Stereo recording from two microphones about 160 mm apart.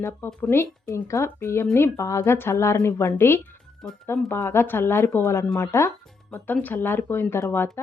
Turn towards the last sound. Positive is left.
turn(degrees=15)  # may be behind; listen again after turning